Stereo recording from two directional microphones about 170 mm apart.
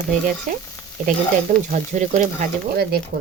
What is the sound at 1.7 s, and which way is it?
Speech, 45° right (ahead or behind).